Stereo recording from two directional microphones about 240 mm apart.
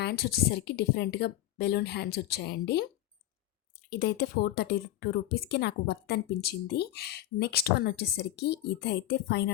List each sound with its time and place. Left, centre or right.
0.0 s speech: left
3.8 s speech: left